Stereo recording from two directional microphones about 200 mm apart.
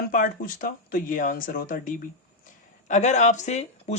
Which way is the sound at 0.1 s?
45° left (ahead or behind).